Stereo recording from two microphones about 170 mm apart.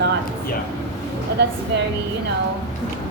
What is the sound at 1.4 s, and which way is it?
Speech, 90° right.